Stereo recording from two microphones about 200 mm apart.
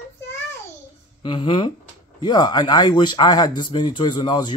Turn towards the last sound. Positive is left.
turn(degrees=20)  # may be behind; listen again after turning